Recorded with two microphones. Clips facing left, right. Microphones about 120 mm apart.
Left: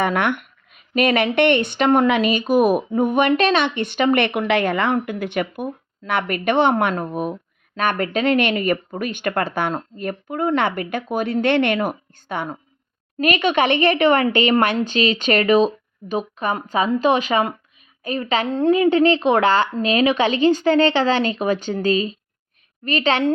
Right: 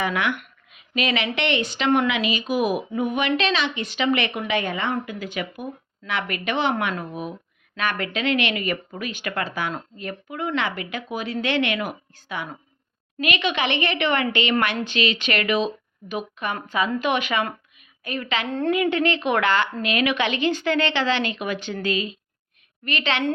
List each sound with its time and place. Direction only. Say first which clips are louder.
0.0 s a woman's voice: left 5 dB; 55° left (ahead or behind); by 23.3 s 40° left (ahead or behind)